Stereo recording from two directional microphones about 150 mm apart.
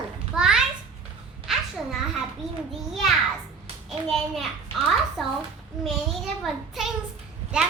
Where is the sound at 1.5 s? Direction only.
Centre (ahead or behind).